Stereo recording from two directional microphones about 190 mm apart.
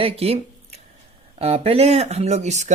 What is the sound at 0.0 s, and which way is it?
Speech, 30° right (ahead or behind).